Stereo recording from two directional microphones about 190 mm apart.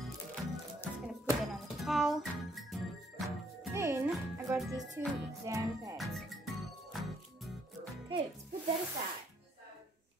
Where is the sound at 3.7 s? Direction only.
15° right (ahead or behind).